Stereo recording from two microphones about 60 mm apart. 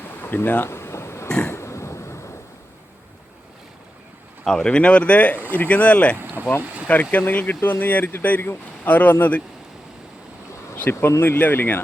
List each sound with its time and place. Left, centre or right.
0.2 s a sound: left
4.4 s speech: centre
6.4 s boat: right
6.8 s speech: left
10.8 s speech: left